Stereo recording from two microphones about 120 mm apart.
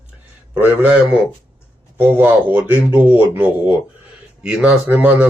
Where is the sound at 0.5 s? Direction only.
10° right (ahead or behind).